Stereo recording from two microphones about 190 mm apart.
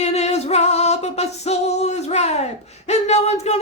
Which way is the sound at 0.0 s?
35° left (ahead or behind).